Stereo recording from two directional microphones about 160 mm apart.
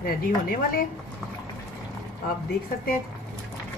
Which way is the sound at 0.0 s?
65° left (ahead or behind).